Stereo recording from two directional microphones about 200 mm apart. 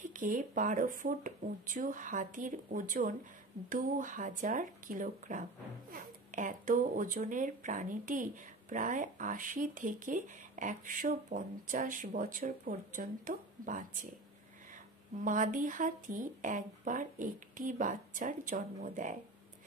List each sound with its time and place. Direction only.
0.0 s speech: 40° right (ahead or behind)
15.2 s speech: 40° right (ahead or behind)